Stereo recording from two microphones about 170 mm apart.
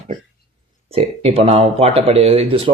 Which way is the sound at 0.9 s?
35° right (ahead or behind).